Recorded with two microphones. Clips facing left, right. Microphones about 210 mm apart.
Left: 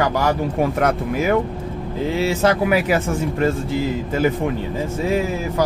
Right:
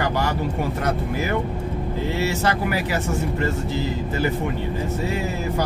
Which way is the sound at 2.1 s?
90° left.